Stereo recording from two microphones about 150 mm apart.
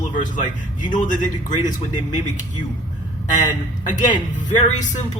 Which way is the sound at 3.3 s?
55° left (ahead or behind).